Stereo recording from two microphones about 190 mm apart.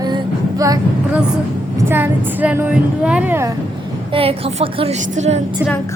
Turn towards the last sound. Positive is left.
turn(degrees=-35)  # may be behind; listen again after turning